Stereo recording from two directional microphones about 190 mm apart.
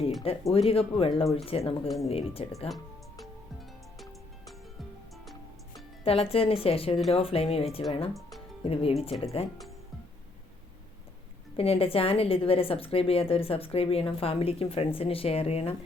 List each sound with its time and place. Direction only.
0.5 s a woman's voice: 30° left (ahead or behind)
2.6 s music: centre (ahead or behind)
6.1 s a woman's voice: 30° left (ahead or behind)
11.5 s a woman's voice: 30° left (ahead or behind)